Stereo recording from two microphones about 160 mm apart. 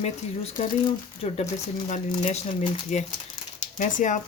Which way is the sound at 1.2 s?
40° left (ahead or behind).